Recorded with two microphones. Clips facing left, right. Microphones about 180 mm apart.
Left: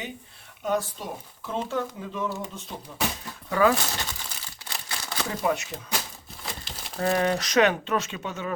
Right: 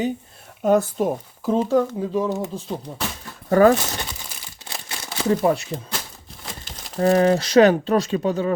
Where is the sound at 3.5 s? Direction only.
45° right (ahead or behind).